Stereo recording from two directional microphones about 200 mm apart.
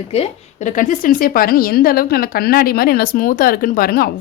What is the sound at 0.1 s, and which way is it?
A woman's voice, 35° left (ahead or behind).